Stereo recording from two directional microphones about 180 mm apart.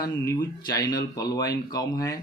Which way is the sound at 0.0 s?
20° left (ahead or behind).